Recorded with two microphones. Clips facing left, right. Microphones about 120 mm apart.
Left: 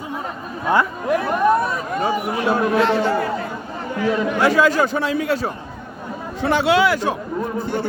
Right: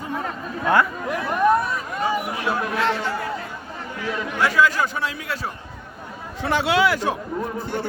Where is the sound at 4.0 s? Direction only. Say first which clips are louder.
Left 6 dB; 40° left (ahead or behind).